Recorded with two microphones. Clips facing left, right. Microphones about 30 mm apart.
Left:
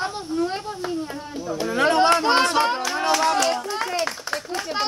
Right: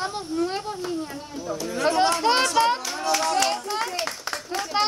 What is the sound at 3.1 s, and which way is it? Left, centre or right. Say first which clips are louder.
Speech: left 3 dB; left.